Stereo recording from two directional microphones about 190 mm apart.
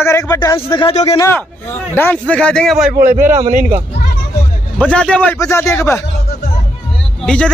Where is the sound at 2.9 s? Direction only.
45° right (ahead or behind).